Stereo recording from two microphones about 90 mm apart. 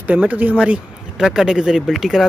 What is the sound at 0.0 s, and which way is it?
Speech, 15° right (ahead or behind).